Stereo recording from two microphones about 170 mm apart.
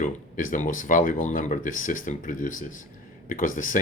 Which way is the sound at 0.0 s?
50° left (ahead or behind).